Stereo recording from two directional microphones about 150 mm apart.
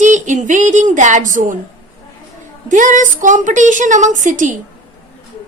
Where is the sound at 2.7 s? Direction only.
60° right (ahead or behind).